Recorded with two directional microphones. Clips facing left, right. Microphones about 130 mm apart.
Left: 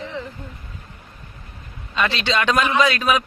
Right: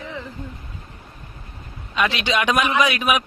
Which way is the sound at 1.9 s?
10° right (ahead or behind).